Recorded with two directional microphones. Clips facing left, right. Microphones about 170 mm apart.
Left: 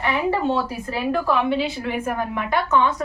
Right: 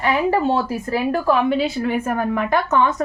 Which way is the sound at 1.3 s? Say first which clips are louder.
Right 6 dB; 45° right (ahead or behind).